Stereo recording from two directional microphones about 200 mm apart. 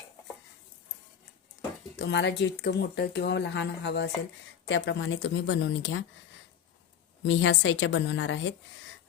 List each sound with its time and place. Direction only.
2.0 s speech: 60° left (ahead or behind)
7.3 s speech: 65° left (ahead or behind)